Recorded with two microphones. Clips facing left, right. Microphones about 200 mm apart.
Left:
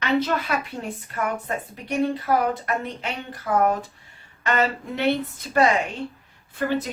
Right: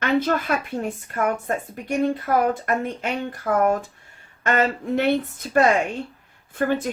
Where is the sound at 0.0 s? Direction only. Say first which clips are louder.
Right 2 dB; 50° right (ahead or behind).